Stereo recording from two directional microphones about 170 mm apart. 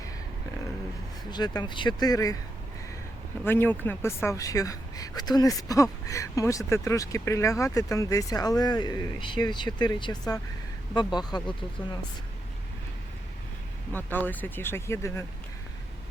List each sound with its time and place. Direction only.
1.3 s speech: 25° left (ahead or behind)
3.4 s speech: 10° left (ahead or behind)
13.9 s speech: 10° left (ahead or behind)